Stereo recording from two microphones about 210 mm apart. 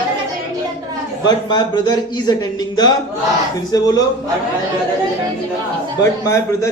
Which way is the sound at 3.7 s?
20° left (ahead or behind).